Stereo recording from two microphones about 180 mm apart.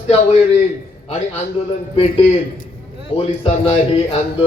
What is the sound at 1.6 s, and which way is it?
Speech, 35° left (ahead or behind).